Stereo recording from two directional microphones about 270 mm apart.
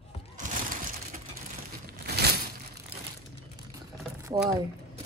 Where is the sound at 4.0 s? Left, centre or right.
Centre.